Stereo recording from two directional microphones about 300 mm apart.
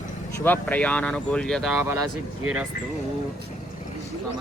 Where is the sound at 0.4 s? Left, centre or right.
Centre.